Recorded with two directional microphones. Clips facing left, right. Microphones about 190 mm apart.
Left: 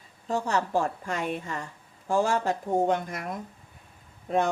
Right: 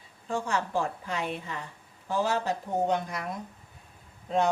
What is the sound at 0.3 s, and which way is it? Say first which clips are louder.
A woman's voice: left 3 dB; 40° left (ahead or behind).